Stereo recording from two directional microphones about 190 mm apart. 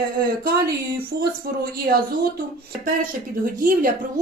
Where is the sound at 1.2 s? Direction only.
55° right (ahead or behind).